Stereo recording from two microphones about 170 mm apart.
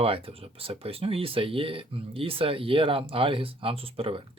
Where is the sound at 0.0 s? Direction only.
35° right (ahead or behind).